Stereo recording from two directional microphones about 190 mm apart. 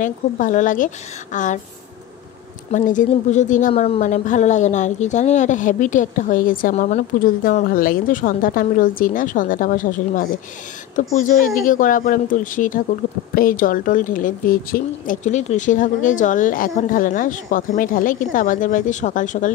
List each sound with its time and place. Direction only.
0.0 s a woman's voice: 40° left (ahead or behind)
2.7 s a woman's voice: 40° left (ahead or behind)